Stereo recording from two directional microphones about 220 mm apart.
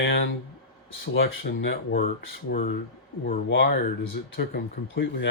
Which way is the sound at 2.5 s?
40° left (ahead or behind).